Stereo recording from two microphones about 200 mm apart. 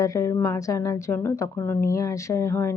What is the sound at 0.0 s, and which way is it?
Speech, 15° left (ahead or behind).